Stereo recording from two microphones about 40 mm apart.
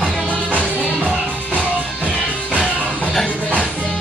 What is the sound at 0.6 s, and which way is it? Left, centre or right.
Music, left.